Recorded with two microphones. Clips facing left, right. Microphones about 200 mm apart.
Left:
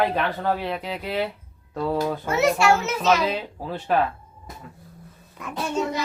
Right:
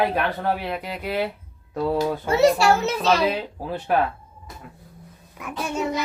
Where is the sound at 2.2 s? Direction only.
30° right (ahead or behind).